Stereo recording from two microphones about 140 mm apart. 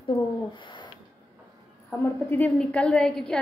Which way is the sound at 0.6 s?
35° left (ahead or behind).